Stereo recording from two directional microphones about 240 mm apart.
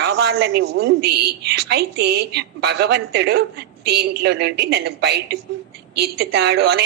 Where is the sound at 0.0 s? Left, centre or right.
Right.